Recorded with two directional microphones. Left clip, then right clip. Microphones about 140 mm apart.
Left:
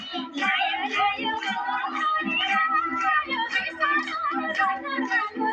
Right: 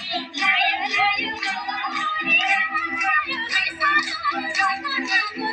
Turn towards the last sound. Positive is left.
turn(degrees=-20)  # may be behind; listen again after turning